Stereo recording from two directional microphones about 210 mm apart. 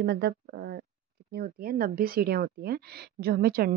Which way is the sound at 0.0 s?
50° right (ahead or behind).